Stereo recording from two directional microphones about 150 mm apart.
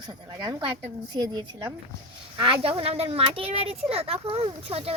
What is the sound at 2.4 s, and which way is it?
Speech, 35° right (ahead or behind).